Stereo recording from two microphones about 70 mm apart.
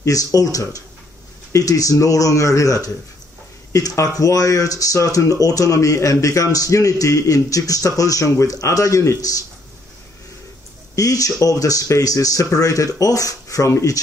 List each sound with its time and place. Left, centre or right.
0.0 s speech: left
11.0 s speech: left